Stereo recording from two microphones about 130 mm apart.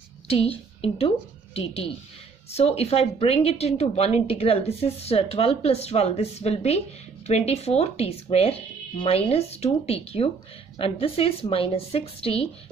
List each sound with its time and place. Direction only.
0.3 s a woman's voice: 50° left (ahead or behind)